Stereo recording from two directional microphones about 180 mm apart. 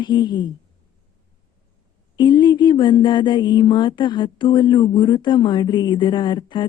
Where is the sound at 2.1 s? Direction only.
25° left (ahead or behind).